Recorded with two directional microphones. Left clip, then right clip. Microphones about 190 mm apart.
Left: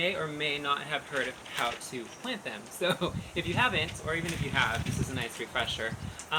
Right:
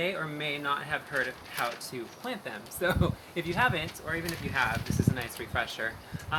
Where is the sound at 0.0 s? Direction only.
15° right (ahead or behind).